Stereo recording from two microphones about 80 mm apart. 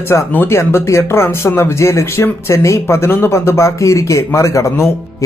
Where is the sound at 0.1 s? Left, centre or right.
Left.